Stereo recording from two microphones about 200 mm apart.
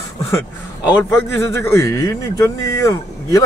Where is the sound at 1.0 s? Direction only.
15° left (ahead or behind).